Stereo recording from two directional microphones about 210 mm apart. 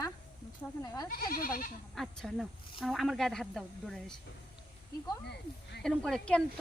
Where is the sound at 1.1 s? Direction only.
45° left (ahead or behind).